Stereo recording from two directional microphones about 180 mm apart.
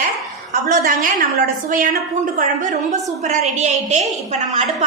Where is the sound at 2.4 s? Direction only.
40° right (ahead or behind).